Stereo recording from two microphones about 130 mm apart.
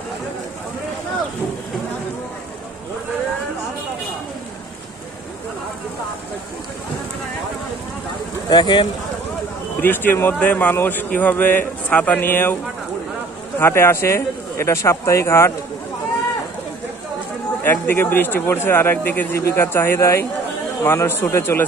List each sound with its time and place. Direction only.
8.5 s speech: 35° left (ahead or behind)
9.8 s a man's voice: 15° left (ahead or behind)
13.6 s speech: 20° left (ahead or behind)
17.6 s a man's voice: 15° left (ahead or behind)